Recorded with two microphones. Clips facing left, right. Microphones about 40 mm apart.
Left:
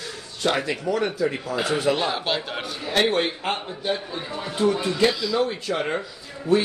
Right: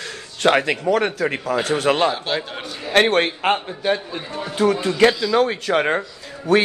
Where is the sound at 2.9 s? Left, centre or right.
Right.